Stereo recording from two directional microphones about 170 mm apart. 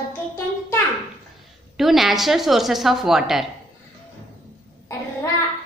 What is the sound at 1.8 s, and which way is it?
Speech, centre (ahead or behind).